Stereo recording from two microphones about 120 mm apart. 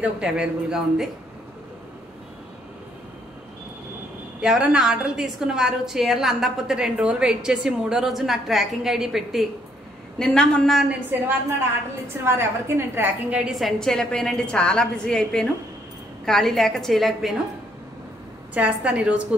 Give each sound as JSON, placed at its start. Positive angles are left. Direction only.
{"t": 0.0, "sound": "speech", "side_deg": -10}
{"t": 4.4, "sound": "a woman's voice", "side_deg": -5}
{"t": 10.9, "sound": "a woman's voice", "side_deg": -15}
{"t": 18.5, "sound": "speech", "side_deg": -10}